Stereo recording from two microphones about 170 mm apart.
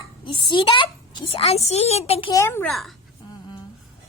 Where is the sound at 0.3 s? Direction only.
30° left (ahead or behind).